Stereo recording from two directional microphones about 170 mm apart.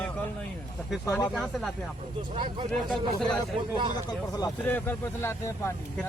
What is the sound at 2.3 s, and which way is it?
Speech, 30° right (ahead or behind).